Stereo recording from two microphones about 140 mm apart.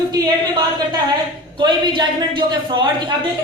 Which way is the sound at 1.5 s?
35° right (ahead or behind).